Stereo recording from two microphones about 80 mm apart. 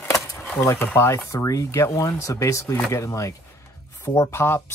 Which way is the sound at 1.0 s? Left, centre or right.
Left.